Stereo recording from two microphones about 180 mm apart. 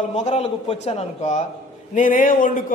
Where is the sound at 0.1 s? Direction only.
35° left (ahead or behind).